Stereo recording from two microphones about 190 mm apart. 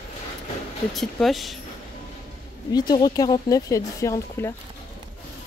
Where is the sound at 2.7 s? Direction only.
20° left (ahead or behind).